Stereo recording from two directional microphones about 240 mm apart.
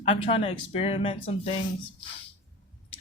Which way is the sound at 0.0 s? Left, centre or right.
Left.